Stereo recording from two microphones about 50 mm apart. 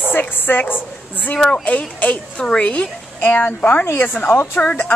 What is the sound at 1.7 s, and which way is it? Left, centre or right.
Speech, left.